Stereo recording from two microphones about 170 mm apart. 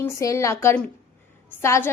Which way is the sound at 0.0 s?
20° left (ahead or behind).